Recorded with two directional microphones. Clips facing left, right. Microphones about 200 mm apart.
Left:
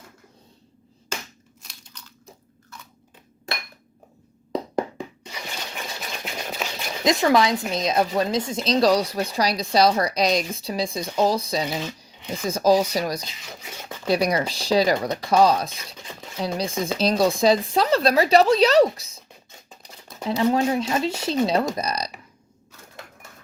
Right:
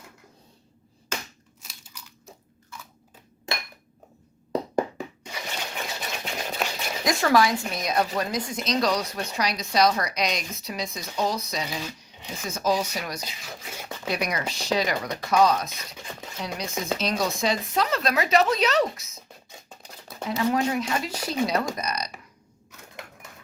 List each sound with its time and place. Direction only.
1.6 s crunch: 5° right (ahead or behind)
4.5 s knock: 5° right (ahead or behind)
5.5 s a sound: centre (ahead or behind)
7.0 s speech: 20° left (ahead or behind)
20.4 s speech: 30° left (ahead or behind)